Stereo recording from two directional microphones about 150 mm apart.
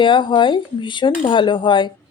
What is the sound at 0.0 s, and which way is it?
Speech, 30° left (ahead or behind).